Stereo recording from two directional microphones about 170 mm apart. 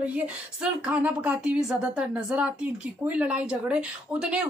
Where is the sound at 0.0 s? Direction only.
5° right (ahead or behind).